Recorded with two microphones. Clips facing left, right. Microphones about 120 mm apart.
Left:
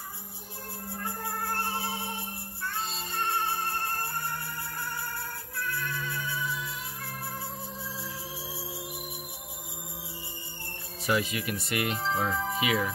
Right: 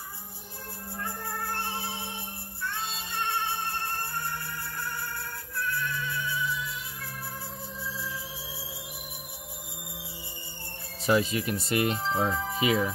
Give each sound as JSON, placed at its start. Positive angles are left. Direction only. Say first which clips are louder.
{"t": 1.5, "sound": "a sound", "louder": "left 2 dB", "side_deg": 40}
{"t": 2.7, "sound": "music", "louder": "left 2 dB", "side_deg": 40}
{"t": 5.8, "sound": "music", "louder": "right 2 dB", "side_deg": 45}
{"t": 11.1, "sound": "speech", "louder": "right 4 dB", "side_deg": -30}